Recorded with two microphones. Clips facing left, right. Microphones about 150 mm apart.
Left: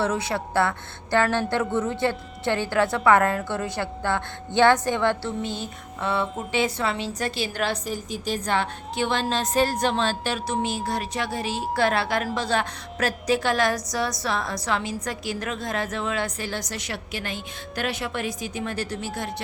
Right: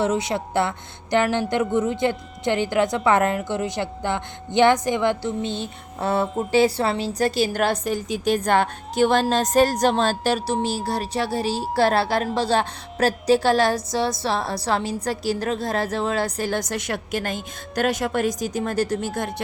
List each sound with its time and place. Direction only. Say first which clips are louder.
0.0 s music: right 3 dB; 20° right (ahead or behind)
6.0 s a woman's voice: right 4 dB; 40° right (ahead or behind)
8.1 s a woman's voice: right 6 dB; 60° right (ahead or behind)